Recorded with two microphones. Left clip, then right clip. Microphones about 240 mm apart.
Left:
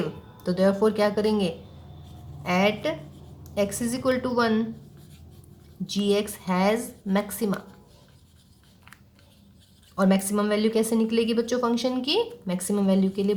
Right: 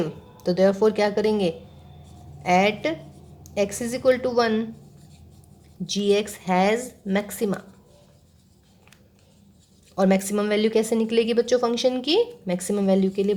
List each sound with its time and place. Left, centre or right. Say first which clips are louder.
0.4 s a woman's voice: right 3 dB; right
5.8 s a woman's voice: right 3 dB; right
9.9 s a woman's voice: right 3 dB; right